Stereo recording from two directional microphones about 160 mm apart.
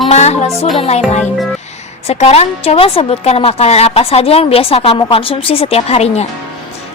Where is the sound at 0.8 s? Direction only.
40° left (ahead or behind).